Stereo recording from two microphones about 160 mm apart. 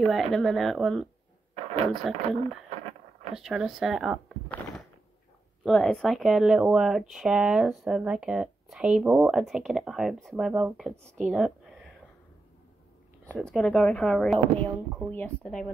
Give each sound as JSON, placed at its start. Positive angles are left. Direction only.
{"t": 0.0, "sound": "speech", "side_deg": 0}
{"t": 5.6, "sound": "speech", "side_deg": 5}
{"t": 11.2, "sound": "a sound", "side_deg": -5}
{"t": 13.3, "sound": "speech", "side_deg": 5}